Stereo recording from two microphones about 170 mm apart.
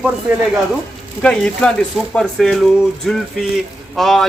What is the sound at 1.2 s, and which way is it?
A man's voice, 5° left (ahead or behind).